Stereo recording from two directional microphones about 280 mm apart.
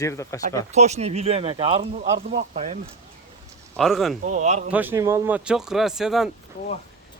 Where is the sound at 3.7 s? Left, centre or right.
Centre.